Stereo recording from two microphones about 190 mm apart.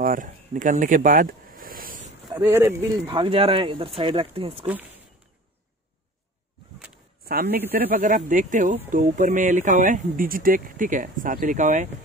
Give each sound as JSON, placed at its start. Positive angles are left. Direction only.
{"t": 0.0, "sound": "a sound", "side_deg": -45}
{"t": 2.3, "sound": "speech", "side_deg": -10}
{"t": 3.1, "sound": "speech", "side_deg": -25}
{"t": 7.2, "sound": "a man's voice", "side_deg": -55}